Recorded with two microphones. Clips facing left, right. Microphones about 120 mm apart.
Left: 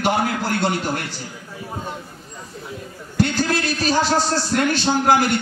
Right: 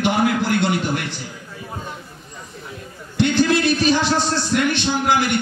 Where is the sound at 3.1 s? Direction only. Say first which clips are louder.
Right 3 dB; 40° left (ahead or behind).